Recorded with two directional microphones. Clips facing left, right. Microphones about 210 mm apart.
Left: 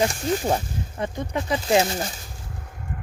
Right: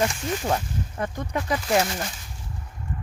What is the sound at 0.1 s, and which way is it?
Speech, 35° left (ahead or behind).